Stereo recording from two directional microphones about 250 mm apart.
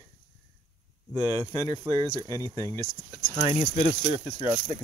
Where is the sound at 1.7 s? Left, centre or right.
Centre.